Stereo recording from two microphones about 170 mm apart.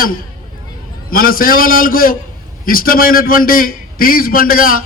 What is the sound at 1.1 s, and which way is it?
A man's voice, 55° left (ahead or behind).